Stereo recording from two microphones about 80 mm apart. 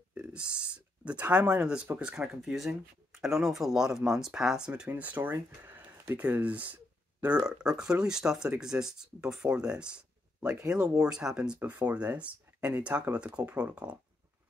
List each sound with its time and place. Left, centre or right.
0.1 s speech: centre
4.8 s speech: right